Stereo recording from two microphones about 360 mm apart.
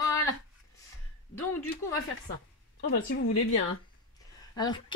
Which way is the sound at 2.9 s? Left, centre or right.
Left.